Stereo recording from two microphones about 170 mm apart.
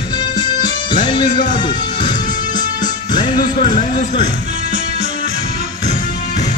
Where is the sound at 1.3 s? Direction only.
50° left (ahead or behind).